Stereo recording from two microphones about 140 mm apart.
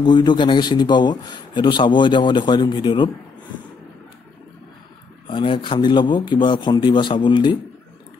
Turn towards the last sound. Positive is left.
turn(degrees=35)  # may be behind; listen again after turning